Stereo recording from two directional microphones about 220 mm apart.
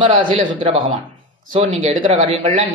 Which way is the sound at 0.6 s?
25° right (ahead or behind).